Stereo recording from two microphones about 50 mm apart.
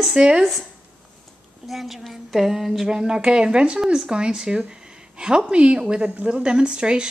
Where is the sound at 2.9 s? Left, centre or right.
Centre.